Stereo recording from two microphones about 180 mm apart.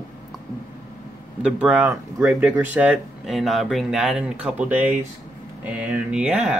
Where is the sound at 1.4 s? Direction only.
5° right (ahead or behind).